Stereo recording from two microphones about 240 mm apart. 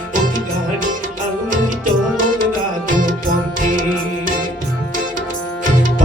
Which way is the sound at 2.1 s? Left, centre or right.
Right.